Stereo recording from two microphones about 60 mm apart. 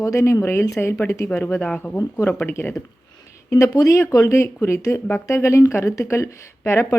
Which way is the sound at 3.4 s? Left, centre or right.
Left.